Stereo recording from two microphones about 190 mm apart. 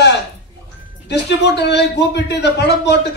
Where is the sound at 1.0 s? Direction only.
60° left (ahead or behind).